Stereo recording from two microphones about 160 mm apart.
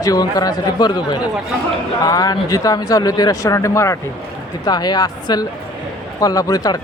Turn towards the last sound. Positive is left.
turn(degrees=25)  # may be behind; listen again after turning